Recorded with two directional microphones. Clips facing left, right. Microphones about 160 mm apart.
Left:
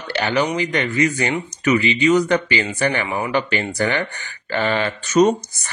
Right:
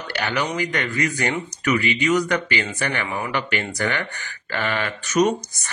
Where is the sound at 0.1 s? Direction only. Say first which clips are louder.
Left 5 dB; 25° left (ahead or behind).